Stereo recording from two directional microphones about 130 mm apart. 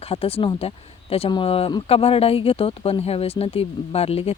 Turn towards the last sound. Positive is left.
turn(degrees=50)  # may be behind; listen again after turning